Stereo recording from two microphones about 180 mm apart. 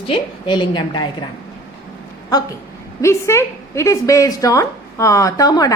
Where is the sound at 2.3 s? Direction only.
20° left (ahead or behind).